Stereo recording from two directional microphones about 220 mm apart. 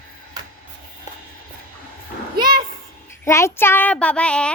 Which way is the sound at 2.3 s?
20° right (ahead or behind).